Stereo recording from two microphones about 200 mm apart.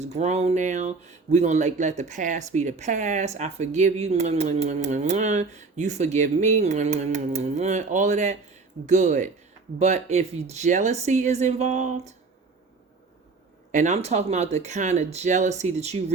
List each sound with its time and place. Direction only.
0.0 s speech: 35° right (ahead or behind)
13.7 s speech: 35° right (ahead or behind)